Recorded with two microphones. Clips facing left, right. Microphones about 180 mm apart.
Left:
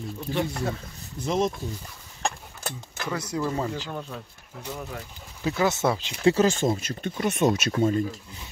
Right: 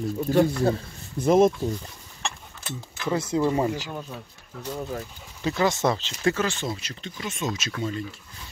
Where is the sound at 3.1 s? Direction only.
25° right (ahead or behind).